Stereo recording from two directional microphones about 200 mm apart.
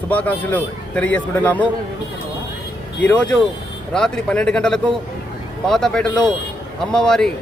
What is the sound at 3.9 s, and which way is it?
Speech, 5° left (ahead or behind).